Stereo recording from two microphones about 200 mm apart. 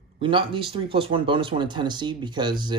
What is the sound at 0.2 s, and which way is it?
Speech, 25° right (ahead or behind).